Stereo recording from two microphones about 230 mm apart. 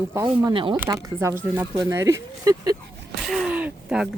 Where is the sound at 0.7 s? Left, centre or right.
Centre.